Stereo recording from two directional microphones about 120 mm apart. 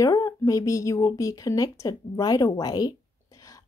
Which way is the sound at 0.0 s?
30° left (ahead or behind).